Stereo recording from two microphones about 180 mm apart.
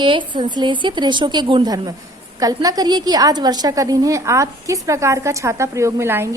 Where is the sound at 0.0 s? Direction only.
25° right (ahead or behind).